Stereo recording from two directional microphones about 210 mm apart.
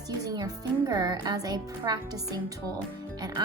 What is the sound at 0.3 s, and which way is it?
A child's voice, 15° right (ahead or behind).